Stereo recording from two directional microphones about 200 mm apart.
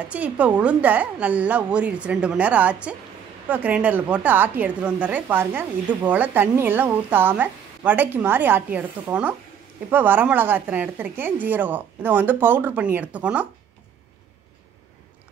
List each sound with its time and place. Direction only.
0.1 s a woman's voice: 5° right (ahead or behind)